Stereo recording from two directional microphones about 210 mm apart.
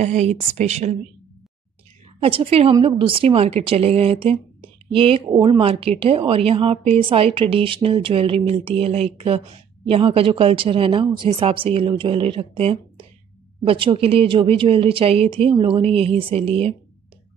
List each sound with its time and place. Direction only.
0.0 s a woman's voice: 30° right (ahead or behind)
2.2 s a woman's voice: 25° right (ahead or behind)